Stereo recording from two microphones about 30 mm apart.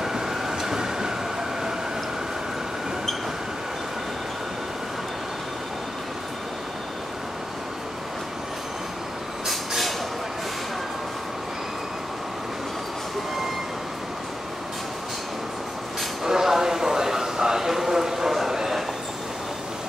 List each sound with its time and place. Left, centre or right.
0.0 s train: centre
9.5 s vehicle: centre
16.3 s a sound: centre